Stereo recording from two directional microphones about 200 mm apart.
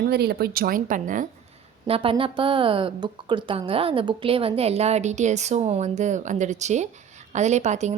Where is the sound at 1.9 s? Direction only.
25° right (ahead or behind).